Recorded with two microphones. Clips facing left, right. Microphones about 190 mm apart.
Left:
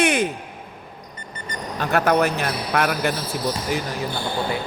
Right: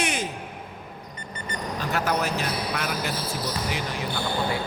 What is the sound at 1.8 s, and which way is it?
Speech, 60° left (ahead or behind).